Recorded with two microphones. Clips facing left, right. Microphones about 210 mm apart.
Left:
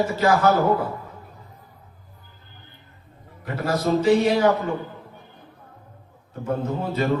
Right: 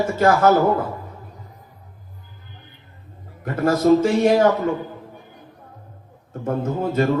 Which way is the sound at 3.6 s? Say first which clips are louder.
Right 4 dB; 50° right (ahead or behind).